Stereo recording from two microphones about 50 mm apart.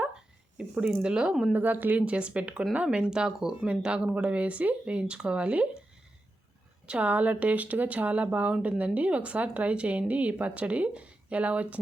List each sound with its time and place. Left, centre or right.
0.5 s speech: centre
1.5 s speech: right
6.8 s speech: right